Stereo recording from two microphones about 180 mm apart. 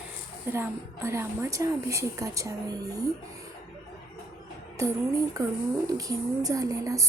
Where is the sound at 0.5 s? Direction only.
15° right (ahead or behind).